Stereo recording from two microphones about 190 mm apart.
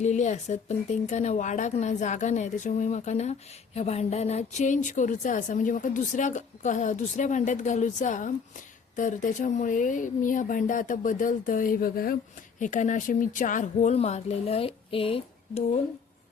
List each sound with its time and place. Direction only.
0.0 s speech: 40° left (ahead or behind)